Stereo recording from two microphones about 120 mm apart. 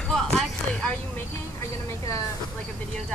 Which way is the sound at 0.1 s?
5° left (ahead or behind).